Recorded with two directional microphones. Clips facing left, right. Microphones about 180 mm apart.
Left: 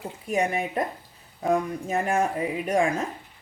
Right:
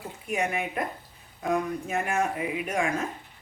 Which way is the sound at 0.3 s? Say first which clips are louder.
Left 4 dB; 35° left (ahead or behind).